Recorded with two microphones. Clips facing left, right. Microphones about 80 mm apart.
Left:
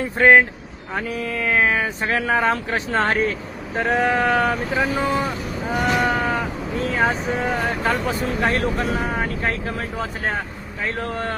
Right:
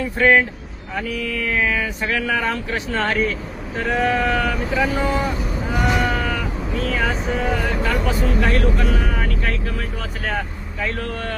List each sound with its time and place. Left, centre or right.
0.0 s speech: left
4.7 s speech: left
5.8 s sheep: centre
6.1 s cat: left
6.7 s speech: left
7.1 s speech: centre
8.4 s speech: left
8.7 s speech: centre
9.0 s speech: left